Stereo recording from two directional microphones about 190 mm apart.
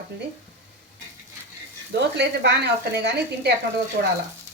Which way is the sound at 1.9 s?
60° right (ahead or behind).